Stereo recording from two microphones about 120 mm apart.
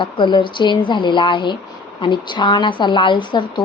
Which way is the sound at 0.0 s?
40° left (ahead or behind).